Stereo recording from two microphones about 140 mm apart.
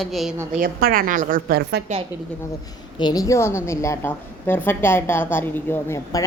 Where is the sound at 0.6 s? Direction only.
90° right.